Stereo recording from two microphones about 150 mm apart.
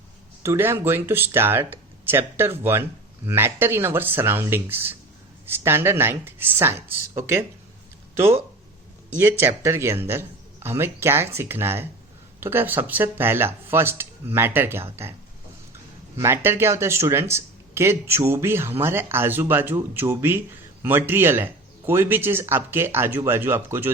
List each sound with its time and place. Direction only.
0.4 s speech: 15° right (ahead or behind)
9.4 s speech: 15° right (ahead or behind)
16.1 s speech: 15° right (ahead or behind)